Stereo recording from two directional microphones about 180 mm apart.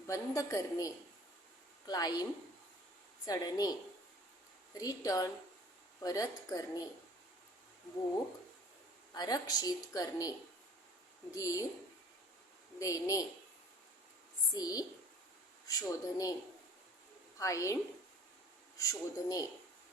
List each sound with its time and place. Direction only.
0.1 s a woman's voice: 20° left (ahead or behind)
3.2 s a woman's voice: 20° left (ahead or behind)
4.8 s a woman's voice: 20° left (ahead or behind)
9.1 s a woman's voice: 20° left (ahead or behind)
11.3 s speech: 20° left (ahead or behind)
12.8 s speech: 20° left (ahead or behind)
14.5 s a woman's voice: 20° left (ahead or behind)
17.3 s a woman's voice: 20° left (ahead or behind)
18.8 s a woman's voice: 20° left (ahead or behind)